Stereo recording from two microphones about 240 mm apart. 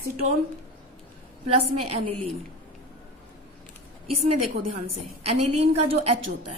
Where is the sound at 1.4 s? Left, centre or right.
Right.